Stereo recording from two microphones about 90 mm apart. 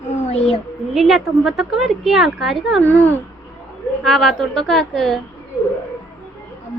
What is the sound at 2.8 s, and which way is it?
Speech, 20° left (ahead or behind).